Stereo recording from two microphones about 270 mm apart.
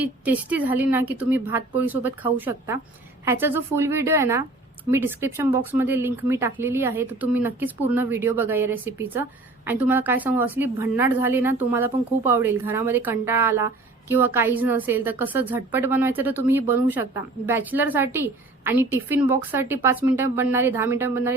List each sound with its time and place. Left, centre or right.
0.0 s speech: centre